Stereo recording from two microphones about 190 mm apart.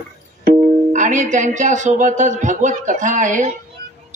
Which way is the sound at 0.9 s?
40° right (ahead or behind).